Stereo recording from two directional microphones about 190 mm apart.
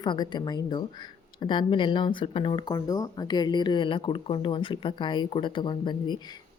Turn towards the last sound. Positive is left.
turn(degrees=25)  # may be behind; listen again after turning